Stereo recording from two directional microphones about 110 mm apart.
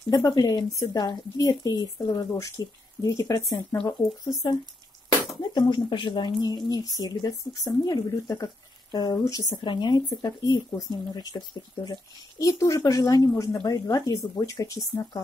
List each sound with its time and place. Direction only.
0.1 s speech: 35° left (ahead or behind)